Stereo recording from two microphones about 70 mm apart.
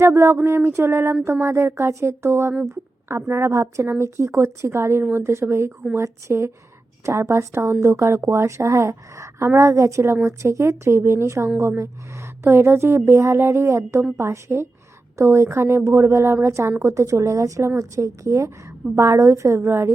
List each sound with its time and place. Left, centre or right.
0.0 s a woman's voice: right